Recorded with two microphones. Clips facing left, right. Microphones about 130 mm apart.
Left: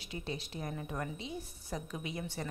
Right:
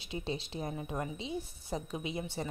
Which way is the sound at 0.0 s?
25° right (ahead or behind).